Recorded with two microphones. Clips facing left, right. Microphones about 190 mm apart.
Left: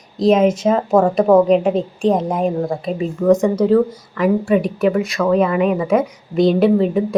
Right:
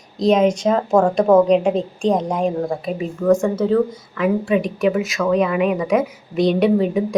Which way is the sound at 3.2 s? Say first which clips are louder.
Left 3 dB; 20° left (ahead or behind).